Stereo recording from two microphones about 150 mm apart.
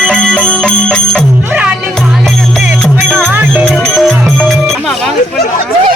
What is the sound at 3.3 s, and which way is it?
Music, 15° right (ahead or behind).